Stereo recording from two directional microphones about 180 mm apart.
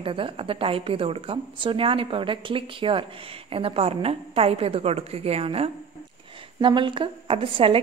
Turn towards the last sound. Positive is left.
turn(degrees=-30)  # may be behind; listen again after turning